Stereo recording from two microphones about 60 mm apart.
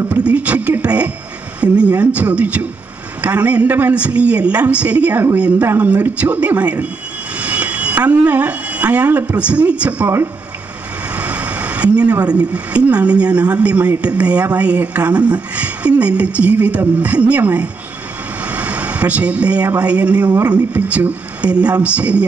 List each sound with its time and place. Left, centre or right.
0.1 s a woman's voice: right
3.6 s speech: right
3.9 s a woman's voice: right
7.3 s a sound: right
9.4 s a woman's voice: right
11.1 s a sound: right
12.3 s a woman's voice: right
18.4 s vehicle: right
19.8 s a woman's voice: right